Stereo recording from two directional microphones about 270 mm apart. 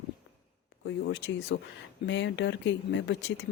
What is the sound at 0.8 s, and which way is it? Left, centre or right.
Speech, left.